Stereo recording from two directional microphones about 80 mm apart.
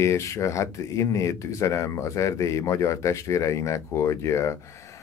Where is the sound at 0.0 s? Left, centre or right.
Left.